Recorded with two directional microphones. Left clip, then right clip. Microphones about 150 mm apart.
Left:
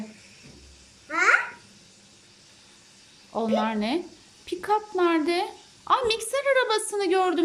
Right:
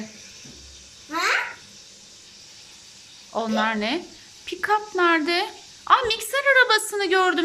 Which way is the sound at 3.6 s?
20° left (ahead or behind).